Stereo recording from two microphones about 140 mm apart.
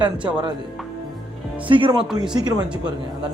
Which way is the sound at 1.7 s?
35° right (ahead or behind).